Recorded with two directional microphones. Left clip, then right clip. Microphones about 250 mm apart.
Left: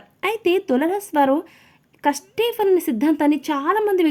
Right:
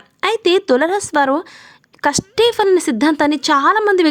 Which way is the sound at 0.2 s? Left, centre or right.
Centre.